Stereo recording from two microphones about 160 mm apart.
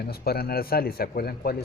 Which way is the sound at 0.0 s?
75° left (ahead or behind).